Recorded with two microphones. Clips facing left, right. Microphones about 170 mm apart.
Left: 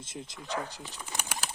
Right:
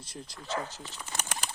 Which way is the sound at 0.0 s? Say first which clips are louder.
Left 2 dB; 20° left (ahead or behind).